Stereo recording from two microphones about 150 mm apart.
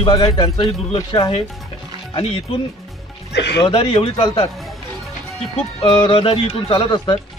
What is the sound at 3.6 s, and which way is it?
Speech, 35° left (ahead or behind).